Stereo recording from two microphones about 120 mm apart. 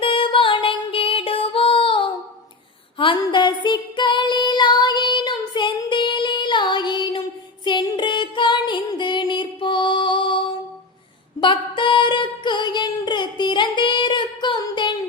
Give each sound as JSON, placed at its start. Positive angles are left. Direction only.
{"t": 0.0, "sound": "music", "side_deg": 45}
{"t": 3.2, "sound": "female singing", "side_deg": 40}
{"t": 7.6, "sound": "music", "side_deg": 40}